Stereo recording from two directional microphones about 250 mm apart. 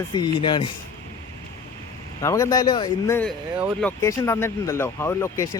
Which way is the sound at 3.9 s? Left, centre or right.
Centre.